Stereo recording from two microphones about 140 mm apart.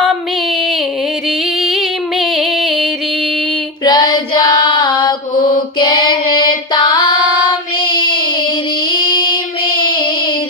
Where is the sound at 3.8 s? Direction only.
30° left (ahead or behind).